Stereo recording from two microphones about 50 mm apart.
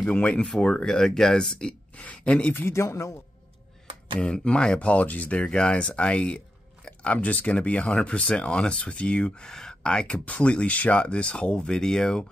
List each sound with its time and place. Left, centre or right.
0.0 s speech: left
2.7 s a man's voice: left
4.2 s speech: centre
10.1 s speech: left; by 12.3 s centre